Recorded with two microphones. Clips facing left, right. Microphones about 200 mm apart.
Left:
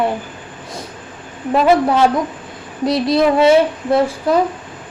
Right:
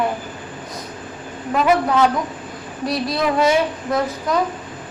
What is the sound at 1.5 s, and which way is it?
A woman's voice, 30° left (ahead or behind).